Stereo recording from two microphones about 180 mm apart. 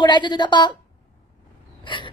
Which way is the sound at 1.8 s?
25° left (ahead or behind).